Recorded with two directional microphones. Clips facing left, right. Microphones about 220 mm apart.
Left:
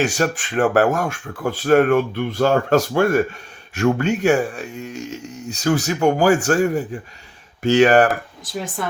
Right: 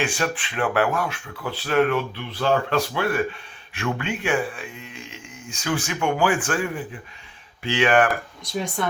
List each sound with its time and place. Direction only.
0.0 s speech: 40° left (ahead or behind)
8.4 s speech: centre (ahead or behind)